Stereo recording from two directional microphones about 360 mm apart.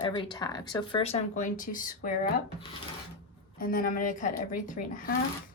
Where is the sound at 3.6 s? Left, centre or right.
Left.